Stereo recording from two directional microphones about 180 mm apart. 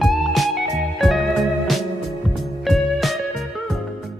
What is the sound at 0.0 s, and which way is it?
Music, centre (ahead or behind).